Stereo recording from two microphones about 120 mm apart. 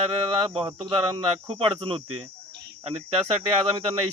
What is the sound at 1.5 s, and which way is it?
Speech, 50° right (ahead or behind).